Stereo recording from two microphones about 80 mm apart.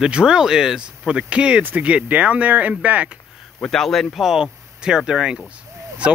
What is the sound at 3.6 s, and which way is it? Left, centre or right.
Speech, centre.